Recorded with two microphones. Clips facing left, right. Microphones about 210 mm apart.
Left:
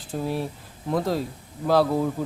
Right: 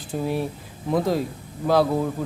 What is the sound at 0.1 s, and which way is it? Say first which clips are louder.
Speech: right 2 dB; centre (ahead or behind).